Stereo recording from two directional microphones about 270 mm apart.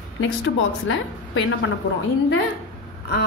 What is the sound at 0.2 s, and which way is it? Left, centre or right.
A woman's voice, left.